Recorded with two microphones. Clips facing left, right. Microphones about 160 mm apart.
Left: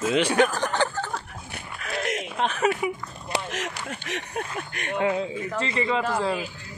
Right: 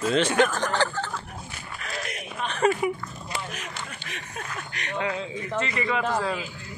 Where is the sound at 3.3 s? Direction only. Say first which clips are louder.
Left 6 dB; 90° left.